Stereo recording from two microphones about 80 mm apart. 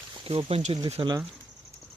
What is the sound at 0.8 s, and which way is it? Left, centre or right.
Speech, right.